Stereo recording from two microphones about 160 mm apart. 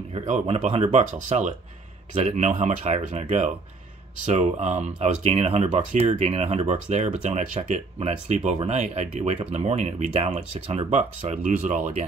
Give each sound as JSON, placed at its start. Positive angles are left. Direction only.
{"t": 0.1, "sound": "speech", "side_deg": -45}